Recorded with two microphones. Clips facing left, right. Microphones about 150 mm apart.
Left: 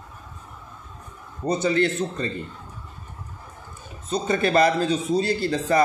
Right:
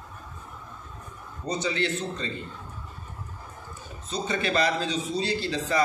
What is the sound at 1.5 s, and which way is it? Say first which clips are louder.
Speech: left 6 dB; 50° left (ahead or behind).